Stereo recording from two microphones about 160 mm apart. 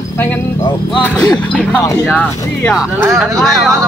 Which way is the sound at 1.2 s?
25° left (ahead or behind).